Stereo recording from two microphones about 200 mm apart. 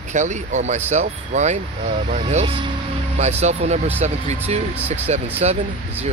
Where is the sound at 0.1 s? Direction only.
35° right (ahead or behind).